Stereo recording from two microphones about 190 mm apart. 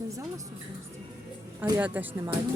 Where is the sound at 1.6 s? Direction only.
10° right (ahead or behind).